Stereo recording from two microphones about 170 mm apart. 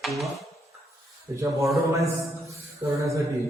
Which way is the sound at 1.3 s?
20° right (ahead or behind).